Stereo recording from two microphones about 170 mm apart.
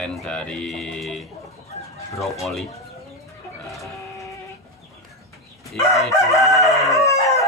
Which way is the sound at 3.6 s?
Centre (ahead or behind).